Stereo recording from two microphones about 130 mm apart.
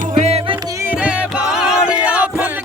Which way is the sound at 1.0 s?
5° right (ahead or behind).